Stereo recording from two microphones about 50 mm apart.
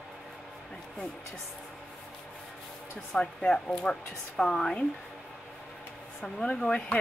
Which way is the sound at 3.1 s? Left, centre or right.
Centre.